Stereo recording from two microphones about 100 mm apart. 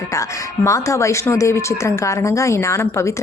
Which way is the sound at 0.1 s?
30° left (ahead or behind).